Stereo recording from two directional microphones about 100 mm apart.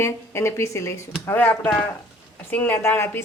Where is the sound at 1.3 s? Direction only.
20° left (ahead or behind).